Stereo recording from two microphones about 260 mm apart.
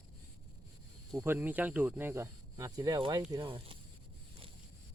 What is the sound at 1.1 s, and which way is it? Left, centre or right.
Speech, centre.